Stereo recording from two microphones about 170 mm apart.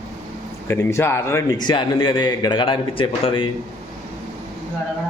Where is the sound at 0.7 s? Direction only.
15° left (ahead or behind); by 3.5 s 30° left (ahead or behind).